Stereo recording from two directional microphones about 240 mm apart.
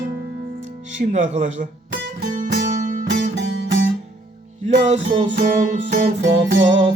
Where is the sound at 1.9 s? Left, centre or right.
Right.